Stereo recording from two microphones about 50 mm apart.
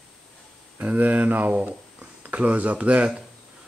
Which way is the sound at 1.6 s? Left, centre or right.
Right.